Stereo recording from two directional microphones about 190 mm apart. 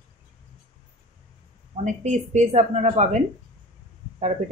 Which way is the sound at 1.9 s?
40° right (ahead or behind).